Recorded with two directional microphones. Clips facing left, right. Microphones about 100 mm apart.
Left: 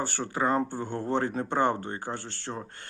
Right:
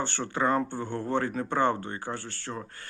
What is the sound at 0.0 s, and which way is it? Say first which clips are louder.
Speech: even; 10° left (ahead or behind).